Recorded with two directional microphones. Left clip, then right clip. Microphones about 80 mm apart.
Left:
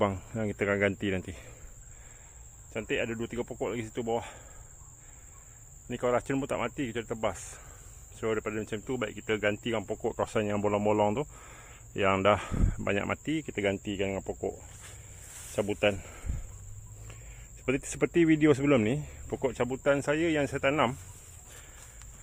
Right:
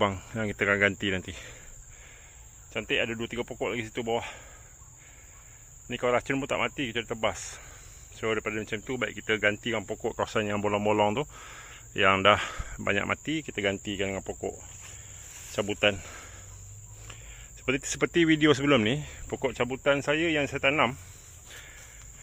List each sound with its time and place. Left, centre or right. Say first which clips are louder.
0.0 s speech: right 2 dB; centre
2.7 s speech: right 3 dB; centre
5.9 s speech: right 2 dB; centre
8.6 s speech: right 2 dB; centre
16.0 s a sound: right 4 dB; centre
17.7 s speech: right 2 dB; centre
18.0 s speech: right 1 dB; centre
19.4 s speech: right 1 dB; centre